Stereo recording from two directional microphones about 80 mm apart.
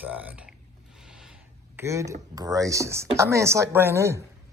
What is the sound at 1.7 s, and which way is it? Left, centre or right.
Speech, right.